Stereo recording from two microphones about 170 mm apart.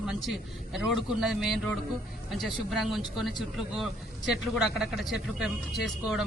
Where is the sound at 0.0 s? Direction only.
Centre (ahead or behind).